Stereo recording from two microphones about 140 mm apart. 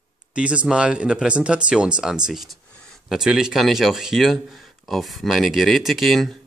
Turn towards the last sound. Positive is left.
turn(degrees=0)  # may be behind; listen again after turning